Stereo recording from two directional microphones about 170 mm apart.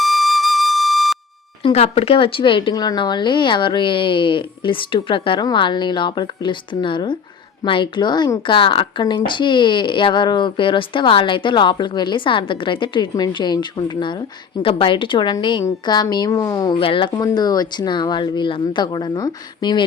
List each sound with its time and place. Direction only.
0.0 s flute: centre (ahead or behind)
1.6 s a woman's voice: 35° left (ahead or behind)